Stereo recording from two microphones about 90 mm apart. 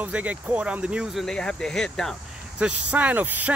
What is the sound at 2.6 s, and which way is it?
Speech, 15° right (ahead or behind).